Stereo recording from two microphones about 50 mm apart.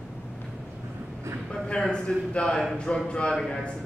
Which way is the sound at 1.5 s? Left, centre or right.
Centre.